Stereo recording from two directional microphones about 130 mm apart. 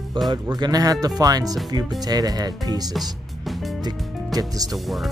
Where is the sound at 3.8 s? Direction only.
30° right (ahead or behind).